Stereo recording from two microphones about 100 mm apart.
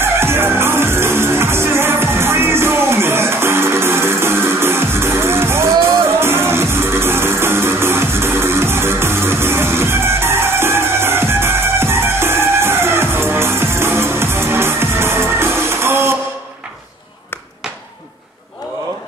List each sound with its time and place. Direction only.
0.0 s music: 25° right (ahead or behind)